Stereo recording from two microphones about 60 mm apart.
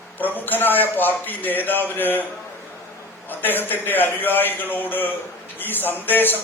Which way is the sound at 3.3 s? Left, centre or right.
Left.